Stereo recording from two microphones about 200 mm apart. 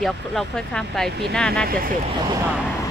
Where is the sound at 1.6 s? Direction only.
45° right (ahead or behind).